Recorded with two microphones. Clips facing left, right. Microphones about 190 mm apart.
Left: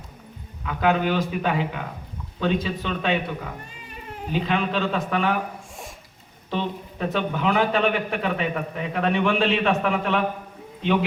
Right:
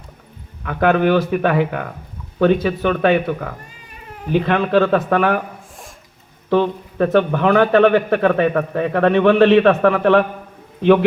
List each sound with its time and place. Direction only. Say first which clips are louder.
0.6 s a man's voice: right 6 dB; 60° right (ahead or behind)
6.5 s a man's voice: right 11 dB; 60° right (ahead or behind)